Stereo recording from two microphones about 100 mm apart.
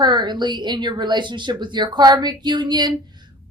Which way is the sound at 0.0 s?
45° right (ahead or behind).